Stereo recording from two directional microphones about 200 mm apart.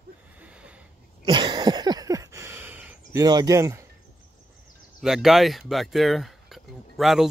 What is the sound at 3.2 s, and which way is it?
Speech, 20° right (ahead or behind).